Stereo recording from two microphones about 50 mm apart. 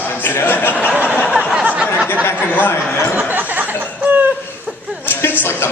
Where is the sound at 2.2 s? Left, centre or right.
Left.